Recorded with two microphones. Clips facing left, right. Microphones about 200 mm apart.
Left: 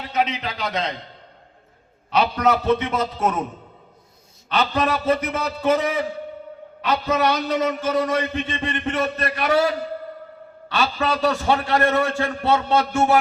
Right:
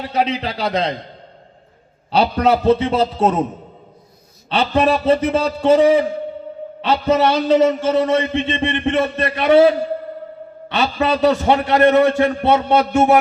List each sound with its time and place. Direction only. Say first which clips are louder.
0.1 s a man's voice: right 3 dB; 35° right (ahead or behind)
2.0 s a man's voice: right 4 dB; 30° right (ahead or behind)
4.4 s a man's voice: right 5 dB; 25° right (ahead or behind)